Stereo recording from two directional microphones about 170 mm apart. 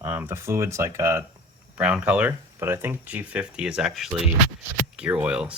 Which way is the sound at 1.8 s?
5° right (ahead or behind).